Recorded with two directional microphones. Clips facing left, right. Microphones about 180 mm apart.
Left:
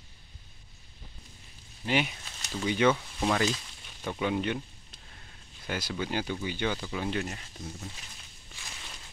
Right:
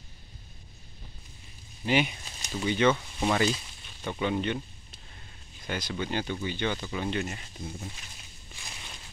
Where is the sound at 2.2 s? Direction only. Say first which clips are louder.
Right 1 dB; 10° right (ahead or behind).